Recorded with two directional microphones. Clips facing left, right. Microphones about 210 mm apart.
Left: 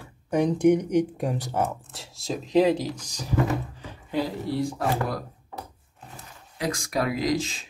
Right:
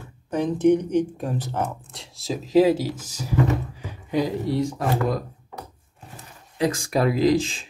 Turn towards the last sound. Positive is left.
turn(degrees=-30)  # may be behind; listen again after turning